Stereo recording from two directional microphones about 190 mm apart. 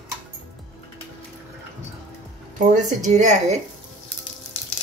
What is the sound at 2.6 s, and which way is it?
Speech, 40° right (ahead or behind).